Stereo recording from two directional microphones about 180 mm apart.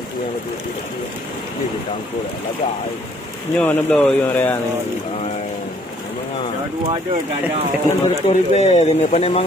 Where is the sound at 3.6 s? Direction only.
10° left (ahead or behind).